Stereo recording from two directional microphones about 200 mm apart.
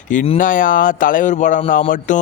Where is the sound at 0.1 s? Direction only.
40° left (ahead or behind).